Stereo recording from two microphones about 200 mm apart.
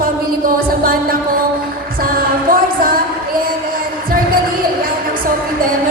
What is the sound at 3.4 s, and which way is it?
Music, 45° right (ahead or behind).